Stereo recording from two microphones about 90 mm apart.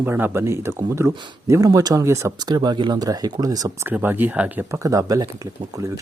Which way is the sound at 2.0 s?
30° right (ahead or behind).